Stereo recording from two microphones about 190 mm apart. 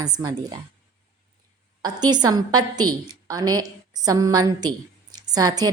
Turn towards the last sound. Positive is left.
turn(degrees=-20)  # may be behind; listen again after turning